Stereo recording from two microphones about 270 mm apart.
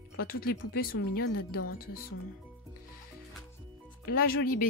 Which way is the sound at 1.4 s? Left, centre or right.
Left.